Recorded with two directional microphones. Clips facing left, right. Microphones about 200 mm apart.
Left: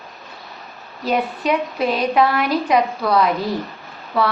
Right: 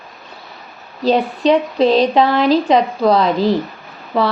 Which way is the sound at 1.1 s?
25° right (ahead or behind).